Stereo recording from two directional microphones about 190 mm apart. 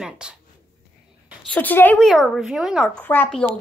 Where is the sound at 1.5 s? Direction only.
10° left (ahead or behind).